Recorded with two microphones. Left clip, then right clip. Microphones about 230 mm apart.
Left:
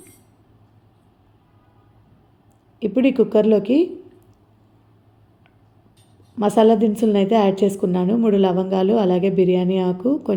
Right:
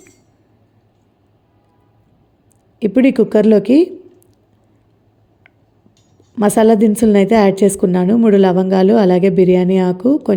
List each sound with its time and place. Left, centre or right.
2.7 s a woman's voice: right
6.3 s a woman's voice: right